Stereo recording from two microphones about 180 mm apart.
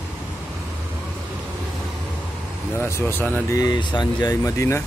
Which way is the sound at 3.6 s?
25° left (ahead or behind).